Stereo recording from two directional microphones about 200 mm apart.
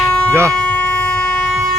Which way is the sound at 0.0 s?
5° left (ahead or behind).